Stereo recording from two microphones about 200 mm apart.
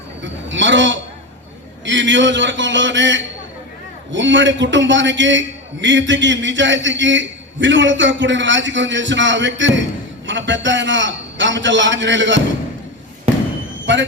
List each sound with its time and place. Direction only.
0.4 s a sound: 65° right (ahead or behind)
1.8 s a man's voice: 65° right (ahead or behind)
13.9 s train: 65° right (ahead or behind)